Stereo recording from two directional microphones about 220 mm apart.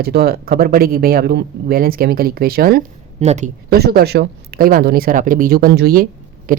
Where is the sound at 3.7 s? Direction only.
45° right (ahead or behind).